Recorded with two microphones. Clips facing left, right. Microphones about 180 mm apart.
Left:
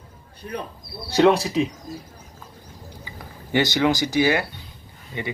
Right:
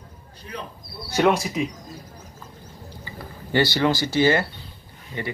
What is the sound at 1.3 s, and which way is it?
Speech, 30° left (ahead or behind).